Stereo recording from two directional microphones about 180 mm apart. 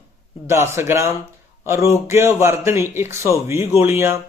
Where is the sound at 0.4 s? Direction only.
15° right (ahead or behind).